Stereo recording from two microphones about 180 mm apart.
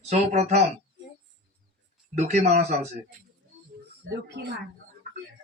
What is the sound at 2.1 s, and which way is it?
Speech, 40° right (ahead or behind).